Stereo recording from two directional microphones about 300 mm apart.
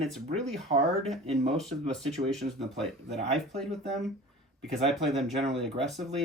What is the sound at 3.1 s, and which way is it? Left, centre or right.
Speech, right.